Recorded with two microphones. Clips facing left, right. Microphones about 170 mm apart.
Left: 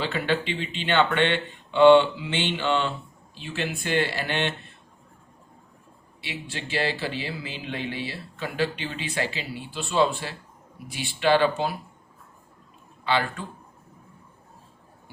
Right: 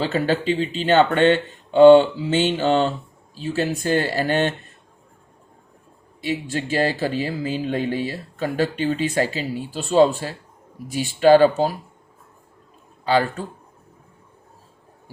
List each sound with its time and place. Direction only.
0.0 s speech: 40° right (ahead or behind)
6.2 s speech: 45° right (ahead or behind)
13.1 s speech: 40° right (ahead or behind)